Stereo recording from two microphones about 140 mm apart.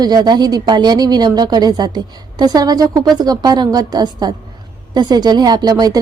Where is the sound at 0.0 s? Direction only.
30° right (ahead or behind).